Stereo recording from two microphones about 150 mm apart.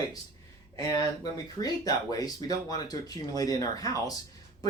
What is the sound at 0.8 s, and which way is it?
Speech, 25° left (ahead or behind).